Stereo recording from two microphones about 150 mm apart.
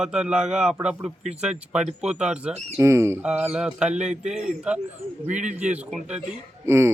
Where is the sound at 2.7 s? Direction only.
20° right (ahead or behind).